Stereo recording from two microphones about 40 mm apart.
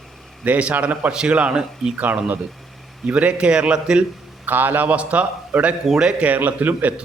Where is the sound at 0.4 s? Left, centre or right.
Right.